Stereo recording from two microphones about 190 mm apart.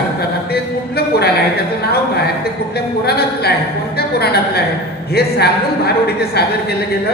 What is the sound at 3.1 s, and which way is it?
Speech, 55° left (ahead or behind).